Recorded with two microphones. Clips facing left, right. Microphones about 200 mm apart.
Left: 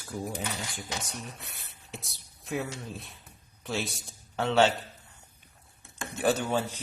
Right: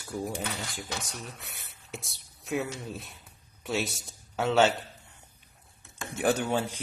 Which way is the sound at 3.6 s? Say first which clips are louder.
Right 2 dB; centre (ahead or behind).